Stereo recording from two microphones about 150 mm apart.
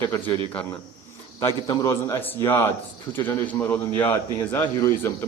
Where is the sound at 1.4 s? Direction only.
25° left (ahead or behind).